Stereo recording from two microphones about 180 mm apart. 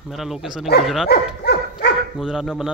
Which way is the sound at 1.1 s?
65° left (ahead or behind).